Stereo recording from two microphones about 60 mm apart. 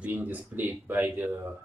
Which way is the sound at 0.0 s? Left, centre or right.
Right.